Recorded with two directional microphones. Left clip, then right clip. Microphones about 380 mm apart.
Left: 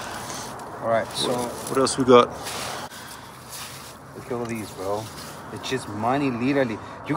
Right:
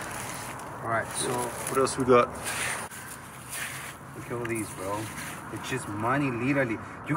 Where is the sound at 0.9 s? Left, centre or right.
Centre.